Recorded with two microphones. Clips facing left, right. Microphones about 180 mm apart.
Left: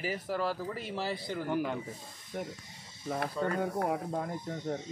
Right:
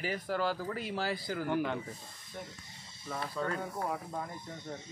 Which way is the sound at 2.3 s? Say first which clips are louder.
Left 7 dB; 55° left (ahead or behind).